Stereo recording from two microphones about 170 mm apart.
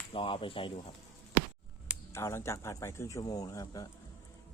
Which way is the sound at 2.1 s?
15° left (ahead or behind).